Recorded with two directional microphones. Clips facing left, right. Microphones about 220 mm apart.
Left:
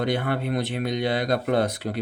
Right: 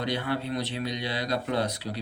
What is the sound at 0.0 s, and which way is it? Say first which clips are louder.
Speech: left 4 dB; 55° left (ahead or behind).